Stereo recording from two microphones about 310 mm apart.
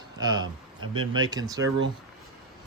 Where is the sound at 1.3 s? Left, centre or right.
Centre.